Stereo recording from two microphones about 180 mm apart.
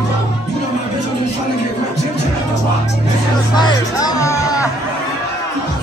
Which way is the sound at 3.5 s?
25° left (ahead or behind).